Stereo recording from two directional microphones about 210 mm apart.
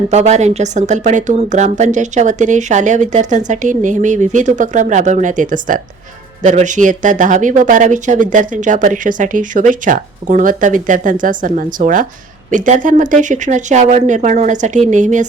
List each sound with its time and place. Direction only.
0.1 s speech: 35° right (ahead or behind)